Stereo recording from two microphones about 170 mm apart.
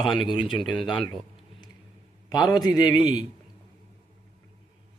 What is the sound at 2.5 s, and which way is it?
Speech, 25° left (ahead or behind).